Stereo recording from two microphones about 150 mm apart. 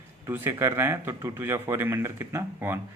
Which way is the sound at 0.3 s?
15° right (ahead or behind).